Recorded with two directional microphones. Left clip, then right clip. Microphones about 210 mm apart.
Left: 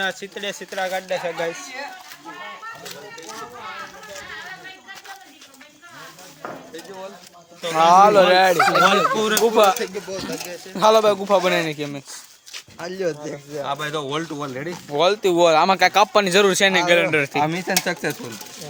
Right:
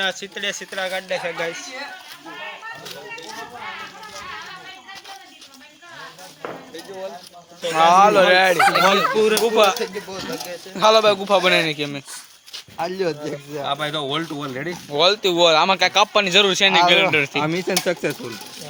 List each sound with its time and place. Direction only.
0.0 s speech: 40° left (ahead or behind)
7.6 s speech: 25° left (ahead or behind)
8.5 s speech: 5° left (ahead or behind)
9.4 s speech: 30° left (ahead or behind); by 12.0 s 10° left (ahead or behind)
12.7 s speech: 30° right (ahead or behind)
13.7 s speech: 10° left (ahead or behind)
14.7 s speech: 15° left (ahead or behind)
17.4 s speech: 10° left (ahead or behind)